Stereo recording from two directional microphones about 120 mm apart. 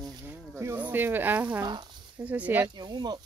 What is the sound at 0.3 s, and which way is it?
Speech, 20° right (ahead or behind).